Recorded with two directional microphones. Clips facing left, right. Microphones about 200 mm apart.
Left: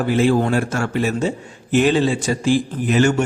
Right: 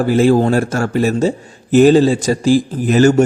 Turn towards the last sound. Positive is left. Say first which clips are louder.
# right 5 dB
turn(degrees=-40)  # may be behind; listen again after turning